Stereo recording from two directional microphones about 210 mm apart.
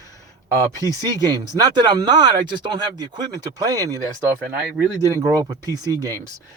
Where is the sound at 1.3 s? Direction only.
20° right (ahead or behind).